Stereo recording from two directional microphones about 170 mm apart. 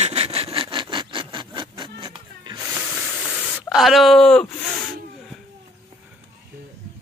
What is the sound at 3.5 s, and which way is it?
Speech, centre (ahead or behind).